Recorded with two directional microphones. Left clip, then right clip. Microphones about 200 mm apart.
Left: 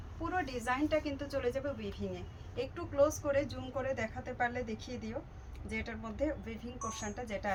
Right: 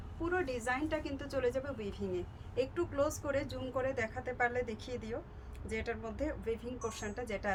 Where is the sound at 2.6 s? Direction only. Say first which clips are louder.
Left 2 dB; 25° right (ahead or behind).